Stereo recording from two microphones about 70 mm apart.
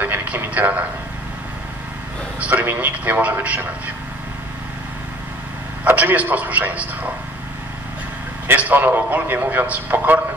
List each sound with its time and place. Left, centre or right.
0.0 s a sound: right
2.4 s a man's voice: right
5.9 s a man's voice: right
8.5 s a man's voice: right